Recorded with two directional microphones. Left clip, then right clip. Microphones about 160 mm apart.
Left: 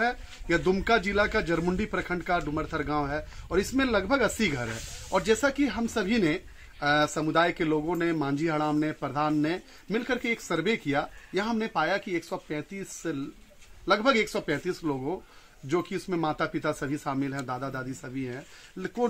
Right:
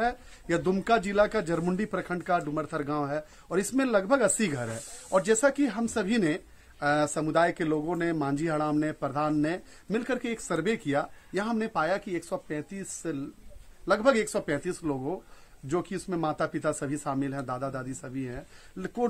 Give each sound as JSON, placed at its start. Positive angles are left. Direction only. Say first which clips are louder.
{"t": 0.0, "sound": "a woman's voice", "louder": "left 1 dB", "side_deg": -30}